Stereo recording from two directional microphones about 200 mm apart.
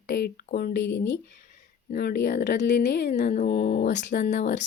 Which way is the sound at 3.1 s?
40° left (ahead or behind).